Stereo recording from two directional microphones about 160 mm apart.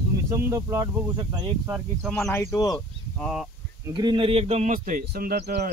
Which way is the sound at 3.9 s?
30° right (ahead or behind).